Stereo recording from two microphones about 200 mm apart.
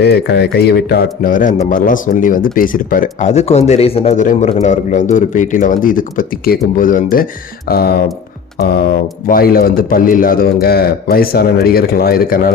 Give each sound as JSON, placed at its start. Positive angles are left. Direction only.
{"t": 0.0, "sound": "a man's voice", "side_deg": 55}
{"t": 9.2, "sound": "a man's voice", "side_deg": 45}